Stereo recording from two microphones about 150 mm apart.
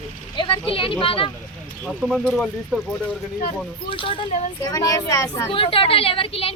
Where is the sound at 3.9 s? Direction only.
35° left (ahead or behind).